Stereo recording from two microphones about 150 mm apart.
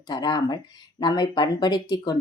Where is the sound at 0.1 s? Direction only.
25° left (ahead or behind).